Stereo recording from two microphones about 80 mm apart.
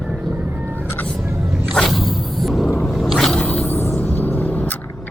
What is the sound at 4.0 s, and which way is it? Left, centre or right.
Vehicle, left.